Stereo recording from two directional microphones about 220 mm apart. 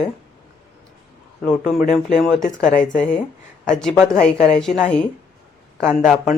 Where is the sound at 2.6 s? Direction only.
35° left (ahead or behind).